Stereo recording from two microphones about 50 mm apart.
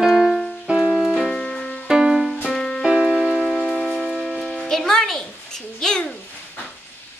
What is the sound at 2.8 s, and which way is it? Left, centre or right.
Music, centre.